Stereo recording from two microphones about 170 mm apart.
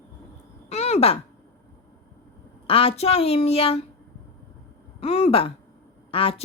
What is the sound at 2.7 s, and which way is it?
Speech, 35° left (ahead or behind).